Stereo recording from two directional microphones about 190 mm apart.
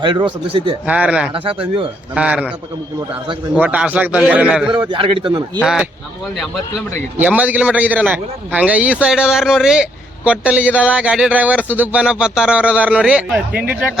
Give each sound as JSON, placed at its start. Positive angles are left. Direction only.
{"t": 0.0, "sound": "a man's voice", "side_deg": -25}
{"t": 0.9, "sound": "a man's voice", "side_deg": -5}
{"t": 1.3, "sound": "a man's voice", "side_deg": -30}
{"t": 2.1, "sound": "a man's voice", "side_deg": -5}
{"t": 3.6, "sound": "a man's voice", "side_deg": -10}
{"t": 4.9, "sound": "a man's voice", "side_deg": -25}
{"t": 5.6, "sound": "a man's voice", "side_deg": -5}